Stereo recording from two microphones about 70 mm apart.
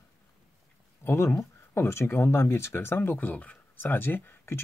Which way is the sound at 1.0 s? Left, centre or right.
Left.